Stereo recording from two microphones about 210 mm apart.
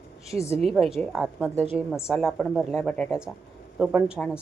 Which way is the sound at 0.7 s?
Centre (ahead or behind).